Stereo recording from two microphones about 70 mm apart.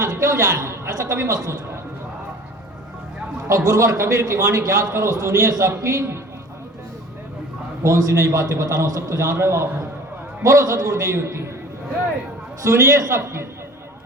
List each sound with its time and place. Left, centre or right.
0.0 s a man's voice: right
3.5 s a man's voice: right
7.9 s a man's voice: right
12.6 s a man's voice: right